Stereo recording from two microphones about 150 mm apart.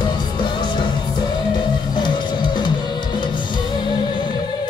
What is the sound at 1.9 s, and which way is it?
Music, 30° left (ahead or behind).